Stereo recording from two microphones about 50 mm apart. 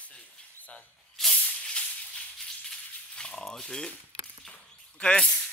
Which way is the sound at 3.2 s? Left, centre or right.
Centre.